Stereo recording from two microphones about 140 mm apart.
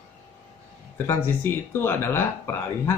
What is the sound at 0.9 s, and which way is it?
Speech, 15° left (ahead or behind).